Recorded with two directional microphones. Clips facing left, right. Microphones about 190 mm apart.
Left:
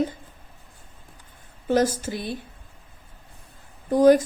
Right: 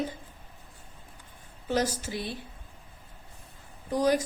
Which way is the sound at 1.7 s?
50° left (ahead or behind).